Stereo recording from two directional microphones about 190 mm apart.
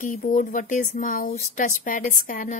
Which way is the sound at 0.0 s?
45° left (ahead or behind).